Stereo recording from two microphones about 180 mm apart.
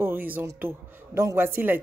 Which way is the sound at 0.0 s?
10° right (ahead or behind).